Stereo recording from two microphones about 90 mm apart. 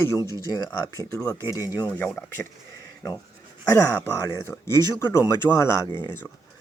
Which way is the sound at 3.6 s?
30° left (ahead or behind).